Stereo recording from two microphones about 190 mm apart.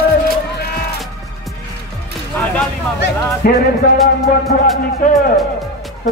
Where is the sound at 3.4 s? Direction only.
50° left (ahead or behind).